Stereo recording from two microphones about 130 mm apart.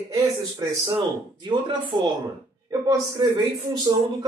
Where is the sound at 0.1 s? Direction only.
25° right (ahead or behind).